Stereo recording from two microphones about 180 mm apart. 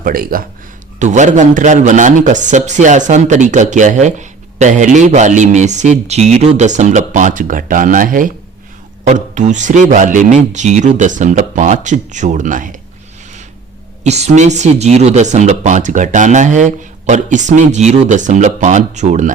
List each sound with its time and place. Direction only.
0.0 s a man's voice: 50° right (ahead or behind)
0.9 s a man's voice: 40° right (ahead or behind)
14.0 s speech: 40° right (ahead or behind)